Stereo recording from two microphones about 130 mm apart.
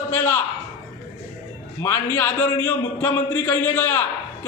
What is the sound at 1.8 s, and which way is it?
A man's voice, 20° left (ahead or behind).